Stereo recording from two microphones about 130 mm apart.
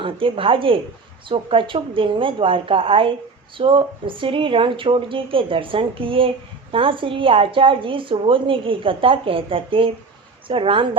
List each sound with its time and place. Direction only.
0.0 s speech: 45° right (ahead or behind)